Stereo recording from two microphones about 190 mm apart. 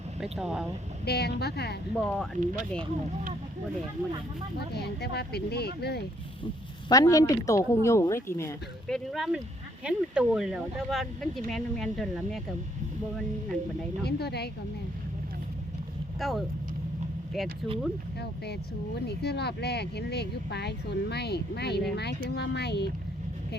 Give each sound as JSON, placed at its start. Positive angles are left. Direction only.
{"t": 0.2, "sound": "speech", "side_deg": -5}
{"t": 1.0, "sound": "speech", "side_deg": 60}
{"t": 2.0, "sound": "speech", "side_deg": 5}
{"t": 2.4, "sound": "speech", "side_deg": -40}
{"t": 4.7, "sound": "speech", "side_deg": 60}
{"t": 6.8, "sound": "speech", "side_deg": 20}
{"t": 8.9, "sound": "speech", "side_deg": 0}
{"t": 14.0, "sound": "speech", "side_deg": 60}
{"t": 16.2, "sound": "speech", "side_deg": 0}
{"t": 19.0, "sound": "speech", "side_deg": 60}